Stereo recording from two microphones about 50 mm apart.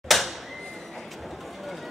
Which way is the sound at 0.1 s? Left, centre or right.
Centre.